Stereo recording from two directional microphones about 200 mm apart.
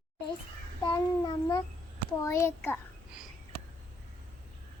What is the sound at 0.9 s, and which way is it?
A child's voice, 20° left (ahead or behind).